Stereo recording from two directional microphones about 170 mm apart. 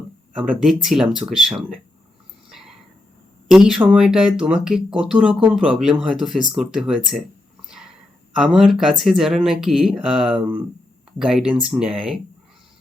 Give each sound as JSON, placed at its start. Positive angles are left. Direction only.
{"t": 0.3, "sound": "speech", "side_deg": 0}
{"t": 2.5, "sound": "a sound", "side_deg": 0}
{"t": 3.5, "sound": "speech", "side_deg": -5}
{"t": 8.4, "sound": "speech", "side_deg": 0}